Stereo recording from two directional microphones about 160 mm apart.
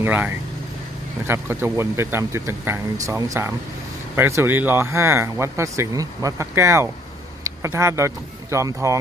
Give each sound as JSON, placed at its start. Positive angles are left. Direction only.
{"t": 0.0, "sound": "speech", "side_deg": -10}